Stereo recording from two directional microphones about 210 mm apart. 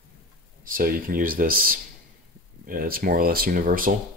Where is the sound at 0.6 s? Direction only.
45° right (ahead or behind).